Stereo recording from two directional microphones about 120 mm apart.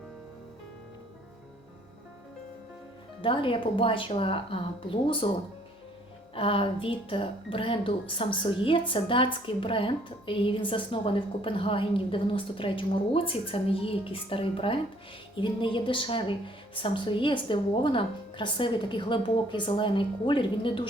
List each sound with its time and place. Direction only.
3.2 s speech: 45° left (ahead or behind)
6.3 s speech: 50° left (ahead or behind)